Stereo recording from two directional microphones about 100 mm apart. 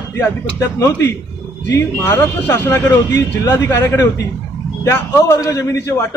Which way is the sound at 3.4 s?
35° left (ahead or behind).